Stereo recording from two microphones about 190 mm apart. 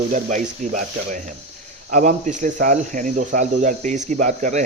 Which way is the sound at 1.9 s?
40° right (ahead or behind).